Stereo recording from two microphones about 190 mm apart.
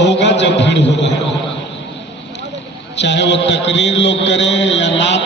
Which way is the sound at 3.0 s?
65° left (ahead or behind).